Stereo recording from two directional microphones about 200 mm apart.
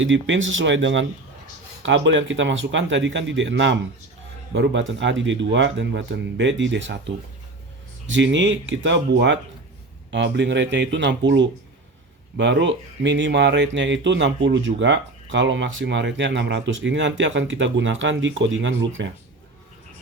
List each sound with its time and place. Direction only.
0.0 s speech: 70° right (ahead or behind)